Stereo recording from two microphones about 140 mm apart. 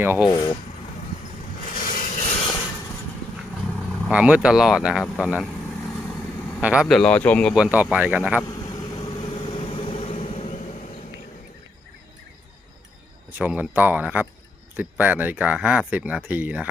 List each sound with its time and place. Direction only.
0.0 s speech: 15° right (ahead or behind)
0.3 s speech: 30° left (ahead or behind)
1.6 s a sound: 80° left; by 2.6 s 45° left (ahead or behind)
4.1 s speech: 10° right (ahead or behind)
6.6 s speech: 10° right (ahead or behind)
6.8 s speech: 5° left (ahead or behind)
7.5 s speech: 10° right (ahead or behind)
9.0 s vehicle: 40° left (ahead or behind)
13.4 s speech: 10° right (ahead or behind)